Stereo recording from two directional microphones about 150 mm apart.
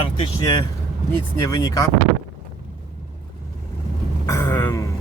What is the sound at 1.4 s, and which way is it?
Speech, 25° left (ahead or behind).